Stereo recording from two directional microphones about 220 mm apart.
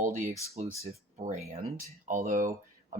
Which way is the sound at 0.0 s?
35° right (ahead or behind).